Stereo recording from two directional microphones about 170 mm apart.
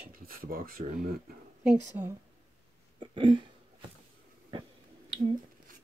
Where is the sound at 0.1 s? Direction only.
55° right (ahead or behind).